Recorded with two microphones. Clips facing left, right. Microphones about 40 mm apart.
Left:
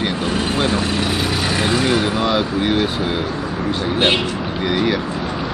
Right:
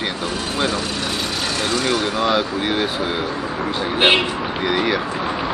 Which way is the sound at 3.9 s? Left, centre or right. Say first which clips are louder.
Right 2 dB; centre.